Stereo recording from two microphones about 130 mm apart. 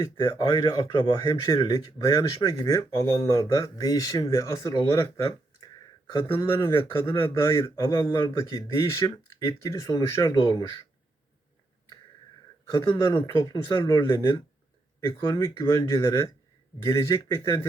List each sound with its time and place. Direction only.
0.0 s speech: 35° left (ahead or behind)
6.1 s speech: 40° left (ahead or behind)
7.2 s speech: 20° left (ahead or behind)
12.6 s speech: 35° left (ahead or behind)